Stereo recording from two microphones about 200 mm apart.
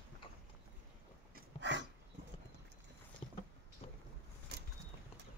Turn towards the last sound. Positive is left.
turn(degrees=-55)  # may be behind; listen again after turning